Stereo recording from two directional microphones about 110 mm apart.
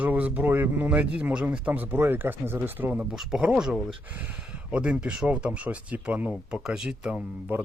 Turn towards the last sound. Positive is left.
turn(degrees=-15)  # may be behind; listen again after turning